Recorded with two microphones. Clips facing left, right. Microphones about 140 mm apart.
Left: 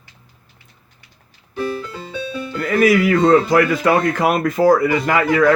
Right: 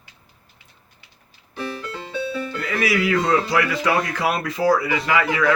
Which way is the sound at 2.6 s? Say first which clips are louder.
Left 9 dB; 50° left (ahead or behind).